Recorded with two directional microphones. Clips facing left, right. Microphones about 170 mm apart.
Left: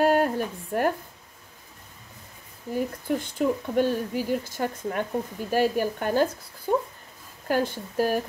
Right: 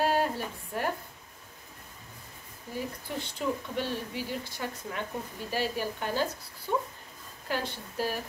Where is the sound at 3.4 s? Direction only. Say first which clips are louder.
Left 8 dB; 50° left (ahead or behind).